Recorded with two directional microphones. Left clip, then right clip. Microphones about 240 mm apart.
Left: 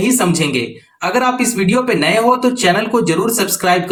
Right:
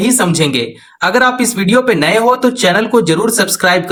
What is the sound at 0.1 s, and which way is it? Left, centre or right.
Speech, right.